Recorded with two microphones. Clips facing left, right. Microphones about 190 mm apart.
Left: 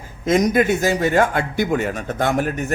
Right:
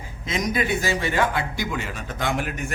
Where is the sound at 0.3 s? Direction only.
45° left (ahead or behind).